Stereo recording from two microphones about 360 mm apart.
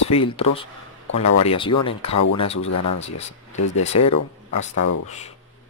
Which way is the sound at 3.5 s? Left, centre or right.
Left.